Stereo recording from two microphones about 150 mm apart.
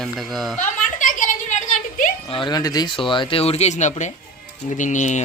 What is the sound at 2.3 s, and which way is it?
Speech, 30° left (ahead or behind).